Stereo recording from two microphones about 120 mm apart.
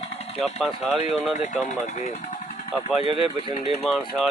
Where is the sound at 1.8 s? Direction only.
80° left.